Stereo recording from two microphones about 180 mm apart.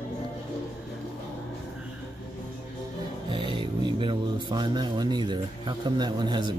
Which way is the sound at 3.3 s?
25° right (ahead or behind).